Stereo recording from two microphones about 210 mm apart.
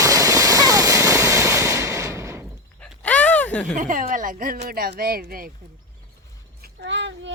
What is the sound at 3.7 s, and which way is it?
Speech, 40° right (ahead or behind).